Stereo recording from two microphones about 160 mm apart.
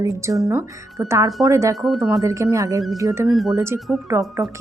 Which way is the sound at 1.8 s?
Centre (ahead or behind).